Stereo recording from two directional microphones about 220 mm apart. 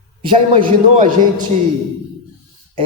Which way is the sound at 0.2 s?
25° right (ahead or behind).